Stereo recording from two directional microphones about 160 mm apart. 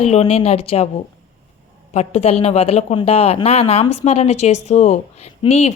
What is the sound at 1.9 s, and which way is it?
A woman's voice, 45° left (ahead or behind).